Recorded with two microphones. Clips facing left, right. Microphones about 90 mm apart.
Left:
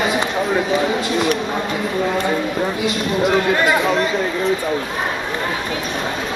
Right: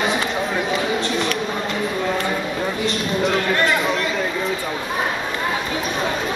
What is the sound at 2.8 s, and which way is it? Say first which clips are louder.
Speech: left 2 dB; 15° left (ahead or behind).